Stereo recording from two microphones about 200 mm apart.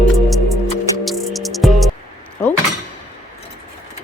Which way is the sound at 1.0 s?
Centre (ahead or behind).